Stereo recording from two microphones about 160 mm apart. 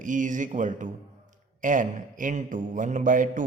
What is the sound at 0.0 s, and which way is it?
A man's voice, 55° right (ahead or behind).